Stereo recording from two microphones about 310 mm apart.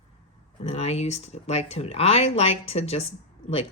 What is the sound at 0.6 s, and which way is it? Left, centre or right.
Speech, centre.